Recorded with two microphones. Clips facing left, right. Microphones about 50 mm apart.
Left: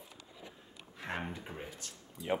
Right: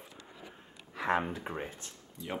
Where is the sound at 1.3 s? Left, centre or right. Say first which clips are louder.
Right 6 dB; right.